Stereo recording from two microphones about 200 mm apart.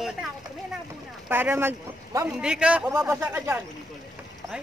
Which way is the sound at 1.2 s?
10° right (ahead or behind).